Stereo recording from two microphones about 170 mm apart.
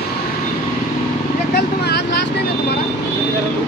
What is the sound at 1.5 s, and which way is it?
Vehicle, 75° left (ahead or behind).